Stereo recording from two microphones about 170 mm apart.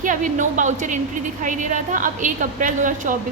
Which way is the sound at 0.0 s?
50° right (ahead or behind).